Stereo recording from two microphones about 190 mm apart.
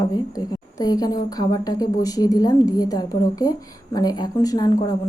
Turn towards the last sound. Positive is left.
turn(degrees=20)  # may be behind; listen again after turning